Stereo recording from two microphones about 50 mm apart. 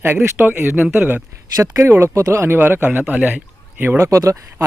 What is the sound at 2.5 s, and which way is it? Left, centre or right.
Speech, right.